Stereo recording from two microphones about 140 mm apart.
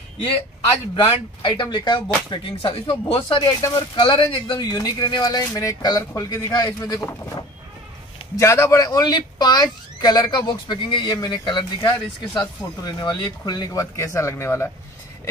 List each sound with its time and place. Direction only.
1.0 s speech: 35° left (ahead or behind)
3.4 s speech: 25° left (ahead or behind)
3.9 s speech: 35° left (ahead or behind); by 14.7 s 15° left (ahead or behind)